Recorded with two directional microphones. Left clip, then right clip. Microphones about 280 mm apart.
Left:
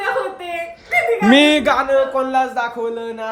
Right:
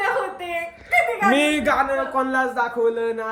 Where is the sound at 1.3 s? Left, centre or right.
Left.